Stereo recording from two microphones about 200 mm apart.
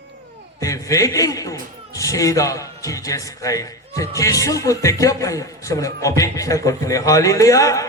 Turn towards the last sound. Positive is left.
turn(degrees=15)  # may be behind; listen again after turning